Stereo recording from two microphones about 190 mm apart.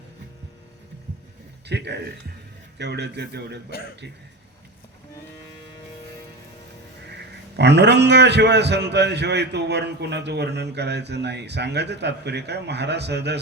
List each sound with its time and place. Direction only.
1.6 s a man's voice: 65° right (ahead or behind)
7.5 s a man's voice: 65° right (ahead or behind)